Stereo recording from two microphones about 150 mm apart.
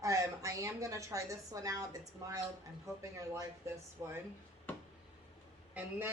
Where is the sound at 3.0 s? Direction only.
20° right (ahead or behind).